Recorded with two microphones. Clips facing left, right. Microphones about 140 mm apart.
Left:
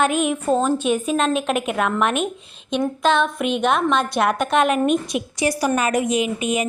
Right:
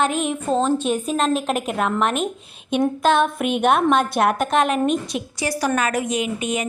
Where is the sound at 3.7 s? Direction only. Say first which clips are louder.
Right 4 dB; 5° right (ahead or behind).